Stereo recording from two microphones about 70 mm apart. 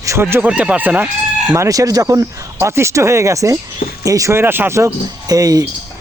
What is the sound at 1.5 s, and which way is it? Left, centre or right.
Speech, right.